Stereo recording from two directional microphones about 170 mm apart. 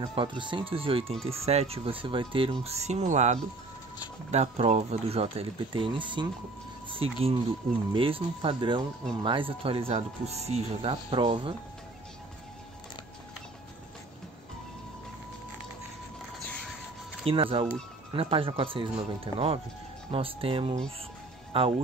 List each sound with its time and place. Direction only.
0.0 s speech: 30° right (ahead or behind)
17.3 s speech: 30° right (ahead or behind)